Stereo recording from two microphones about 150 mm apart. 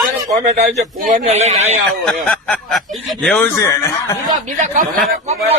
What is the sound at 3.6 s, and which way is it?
Speech, 20° left (ahead or behind).